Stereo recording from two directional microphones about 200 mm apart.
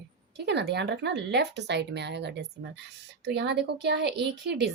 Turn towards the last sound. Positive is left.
turn(degrees=-55)  # may be behind; listen again after turning